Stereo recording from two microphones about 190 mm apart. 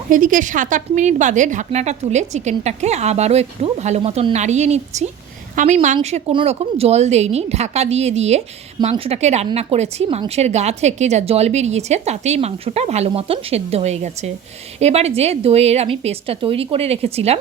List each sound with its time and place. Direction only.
0.1 s a woman's voice: 45° right (ahead or behind)